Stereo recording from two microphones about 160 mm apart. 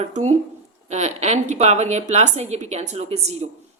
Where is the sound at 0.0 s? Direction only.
45° right (ahead or behind).